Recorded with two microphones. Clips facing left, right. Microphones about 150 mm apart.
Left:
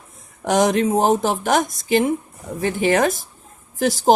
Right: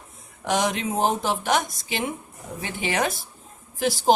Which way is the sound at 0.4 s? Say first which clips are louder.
Left 7 dB; 45° left (ahead or behind).